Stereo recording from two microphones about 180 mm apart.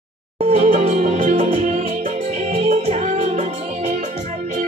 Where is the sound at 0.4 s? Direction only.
35° right (ahead or behind).